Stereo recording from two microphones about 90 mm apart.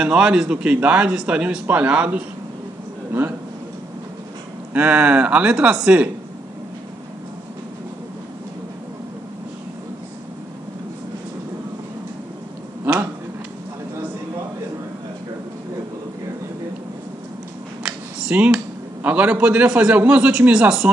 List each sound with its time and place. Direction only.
0.0 s a man's voice: 10° right (ahead or behind)
3.1 s speech: 25° right (ahead or behind)
4.7 s a man's voice: 15° right (ahead or behind)
17.8 s a sound: 10° right (ahead or behind)
19.0 s a man's voice: 15° right (ahead or behind)